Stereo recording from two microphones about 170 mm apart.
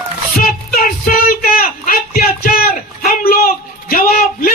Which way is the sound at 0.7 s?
60° left (ahead or behind).